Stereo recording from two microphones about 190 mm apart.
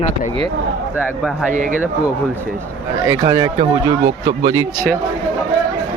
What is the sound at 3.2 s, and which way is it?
Speech, 25° right (ahead or behind).